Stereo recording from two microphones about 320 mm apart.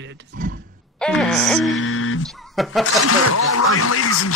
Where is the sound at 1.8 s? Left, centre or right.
Left.